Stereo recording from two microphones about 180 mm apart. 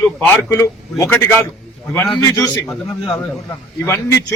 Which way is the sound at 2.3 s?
20° left (ahead or behind).